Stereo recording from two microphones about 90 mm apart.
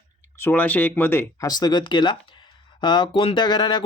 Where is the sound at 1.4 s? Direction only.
45° left (ahead or behind).